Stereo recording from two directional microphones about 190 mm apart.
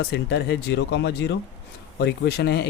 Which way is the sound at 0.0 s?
60° left (ahead or behind).